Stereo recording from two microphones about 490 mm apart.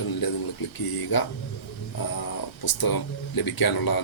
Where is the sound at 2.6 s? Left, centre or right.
Left.